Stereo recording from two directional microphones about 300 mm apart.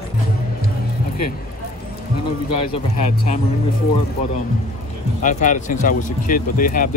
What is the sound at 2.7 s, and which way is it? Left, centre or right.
Speech, left.